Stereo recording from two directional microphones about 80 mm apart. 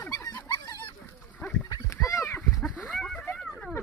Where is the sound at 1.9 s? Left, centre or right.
Left.